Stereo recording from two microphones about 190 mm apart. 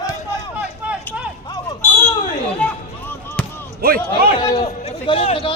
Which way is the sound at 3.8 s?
50° right (ahead or behind).